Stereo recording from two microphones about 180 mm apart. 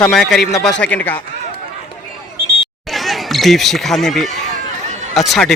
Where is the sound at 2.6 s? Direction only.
Centre (ahead or behind).